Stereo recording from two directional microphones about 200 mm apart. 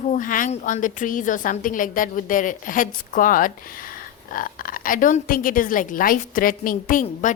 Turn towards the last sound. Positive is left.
turn(degrees=40)  # may be behind; listen again after turning